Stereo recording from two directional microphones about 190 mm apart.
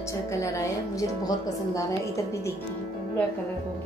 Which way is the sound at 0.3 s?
15° left (ahead or behind).